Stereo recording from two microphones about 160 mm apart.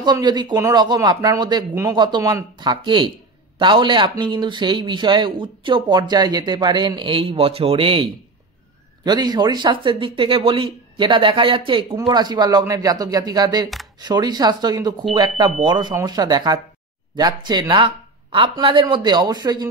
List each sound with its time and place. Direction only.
0.0 s speech: 25° right (ahead or behind)